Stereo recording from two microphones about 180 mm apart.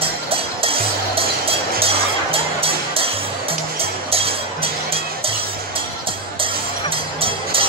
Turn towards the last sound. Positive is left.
turn(degrees=-30)  # may be behind; listen again after turning